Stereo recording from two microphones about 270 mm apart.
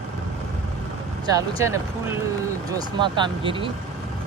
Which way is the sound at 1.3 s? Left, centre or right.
Centre.